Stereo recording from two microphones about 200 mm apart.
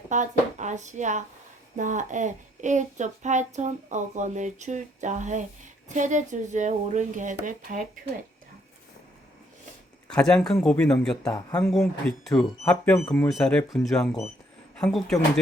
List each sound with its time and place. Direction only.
0.1 s child singing: 35° right (ahead or behind)
10.1 s speech: 5° left (ahead or behind)